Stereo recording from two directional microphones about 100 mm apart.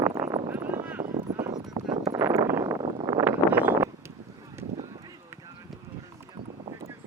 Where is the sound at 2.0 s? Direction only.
30° right (ahead or behind).